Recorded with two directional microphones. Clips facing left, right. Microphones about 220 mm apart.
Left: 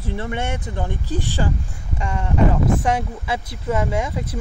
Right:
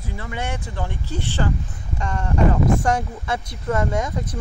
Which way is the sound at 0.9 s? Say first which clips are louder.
Left 3 dB; 15° left (ahead or behind).